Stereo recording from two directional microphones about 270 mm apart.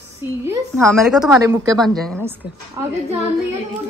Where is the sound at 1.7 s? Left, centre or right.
Centre.